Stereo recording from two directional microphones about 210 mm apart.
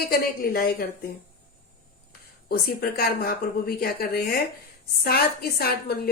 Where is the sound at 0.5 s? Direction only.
45° left (ahead or behind).